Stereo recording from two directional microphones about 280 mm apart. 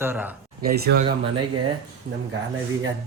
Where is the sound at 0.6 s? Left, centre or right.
Right.